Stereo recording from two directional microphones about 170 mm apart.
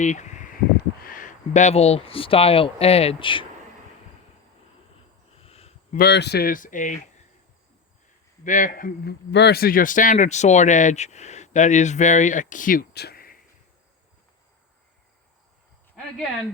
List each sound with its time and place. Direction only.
0.0 s a sound: 45° left (ahead or behind)
1.0 s speech: 50° left (ahead or behind); by 3.4 s 30° left (ahead or behind)
5.3 s a sound: 35° left (ahead or behind)
6.0 s speech: 80° left; by 7.0 s 50° left (ahead or behind)
8.4 s speech: 50° left (ahead or behind)
9.3 s speech: 75° left (ahead or behind); by 13.4 s 60° left (ahead or behind)